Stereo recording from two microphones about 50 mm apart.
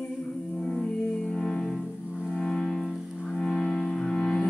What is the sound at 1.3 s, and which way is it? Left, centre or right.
Music, centre.